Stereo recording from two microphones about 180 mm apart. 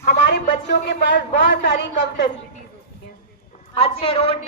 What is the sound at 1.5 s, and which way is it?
Speech, 65° left (ahead or behind).